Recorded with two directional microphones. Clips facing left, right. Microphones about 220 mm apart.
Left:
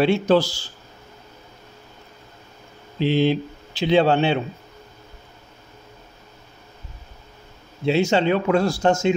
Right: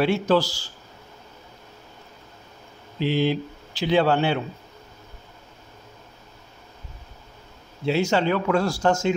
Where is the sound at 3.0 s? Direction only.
25° left (ahead or behind).